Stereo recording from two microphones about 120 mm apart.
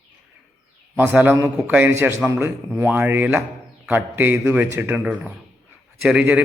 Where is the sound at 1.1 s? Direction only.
15° right (ahead or behind).